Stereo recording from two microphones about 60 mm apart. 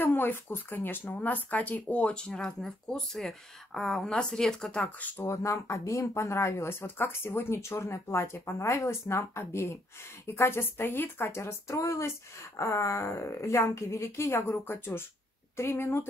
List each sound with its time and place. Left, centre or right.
0.0 s speech: left; by 2.3 s centre
2.3 s speech: centre
5.2 s speech: left
10.2 s speech: left
11.7 s a woman's voice: left
15.5 s speech: left